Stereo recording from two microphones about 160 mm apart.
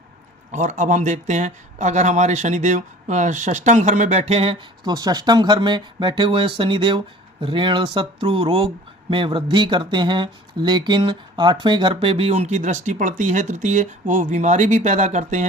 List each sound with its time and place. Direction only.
0.5 s speech: 50° right (ahead or behind)
4.9 s speech: 25° right (ahead or behind); by 15.4 s 45° right (ahead or behind)